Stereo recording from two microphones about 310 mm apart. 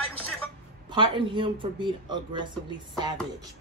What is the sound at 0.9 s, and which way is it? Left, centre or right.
A woman's voice, centre.